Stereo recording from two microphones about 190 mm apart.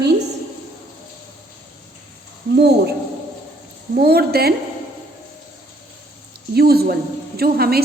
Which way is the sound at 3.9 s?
55° right (ahead or behind).